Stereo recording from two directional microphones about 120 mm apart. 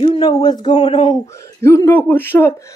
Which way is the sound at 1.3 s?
25° left (ahead or behind).